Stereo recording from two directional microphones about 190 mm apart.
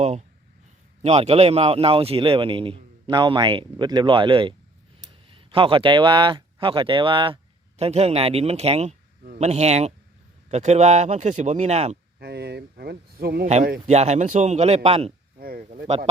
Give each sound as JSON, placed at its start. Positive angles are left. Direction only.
{"t": 0.0, "sound": "a man's voice", "side_deg": -35}
{"t": 12.2, "sound": "a man's voice", "side_deg": -60}
{"t": 15.4, "sound": "speech", "side_deg": -50}